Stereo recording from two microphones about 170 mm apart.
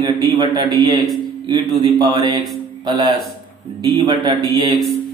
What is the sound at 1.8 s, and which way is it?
A man's voice, 25° right (ahead or behind).